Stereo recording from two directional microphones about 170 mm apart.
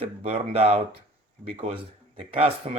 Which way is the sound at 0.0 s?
35° right (ahead or behind).